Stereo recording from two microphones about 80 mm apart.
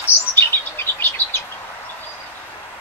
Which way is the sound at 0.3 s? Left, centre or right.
Left.